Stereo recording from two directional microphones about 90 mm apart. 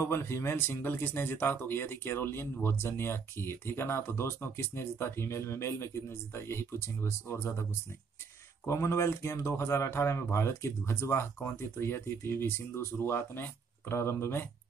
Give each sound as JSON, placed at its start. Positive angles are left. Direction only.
{"t": 0.0, "sound": "speech", "side_deg": 30}
{"t": 8.6, "sound": "speech", "side_deg": 30}